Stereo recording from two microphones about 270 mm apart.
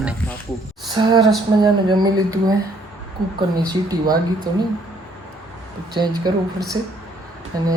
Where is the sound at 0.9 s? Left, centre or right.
Centre.